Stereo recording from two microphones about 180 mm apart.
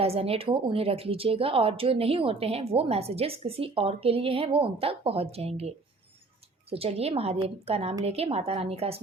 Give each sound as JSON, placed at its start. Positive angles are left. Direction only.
{"t": 0.0, "sound": "speech", "side_deg": -35}